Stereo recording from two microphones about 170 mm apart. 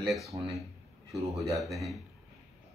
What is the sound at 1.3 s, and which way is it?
Speech, 20° right (ahead or behind).